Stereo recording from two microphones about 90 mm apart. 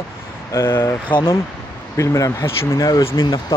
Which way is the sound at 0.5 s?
30° left (ahead or behind).